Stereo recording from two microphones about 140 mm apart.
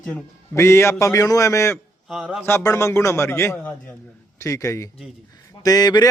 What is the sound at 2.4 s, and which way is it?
A man's voice, 20° left (ahead or behind).